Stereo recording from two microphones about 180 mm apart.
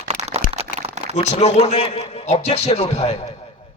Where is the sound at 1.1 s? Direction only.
40° left (ahead or behind).